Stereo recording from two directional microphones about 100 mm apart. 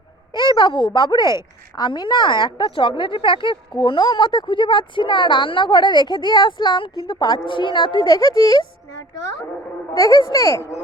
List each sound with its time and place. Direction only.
0.3 s a woman's voice: 50° left (ahead or behind)
8.1 s a child's voice: 40° left (ahead or behind)
10.0 s a child's voice: 35° left (ahead or behind)